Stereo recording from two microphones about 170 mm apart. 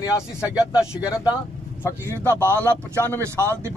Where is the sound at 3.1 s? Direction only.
15° right (ahead or behind).